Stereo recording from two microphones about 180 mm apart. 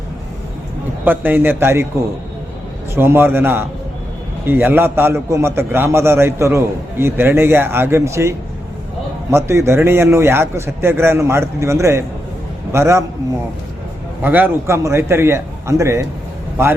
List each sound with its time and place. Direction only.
1.0 s a man's voice: 10° right (ahead or behind)
2.9 s a man's voice: 15° right (ahead or behind)
14.2 s a man's voice: 10° right (ahead or behind)